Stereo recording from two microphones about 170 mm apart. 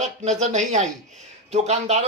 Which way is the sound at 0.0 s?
45° right (ahead or behind).